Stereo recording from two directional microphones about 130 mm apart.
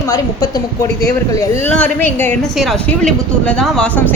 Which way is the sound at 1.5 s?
15° left (ahead or behind).